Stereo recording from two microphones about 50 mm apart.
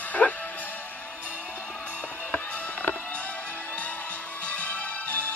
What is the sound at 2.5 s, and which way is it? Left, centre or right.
Music, left.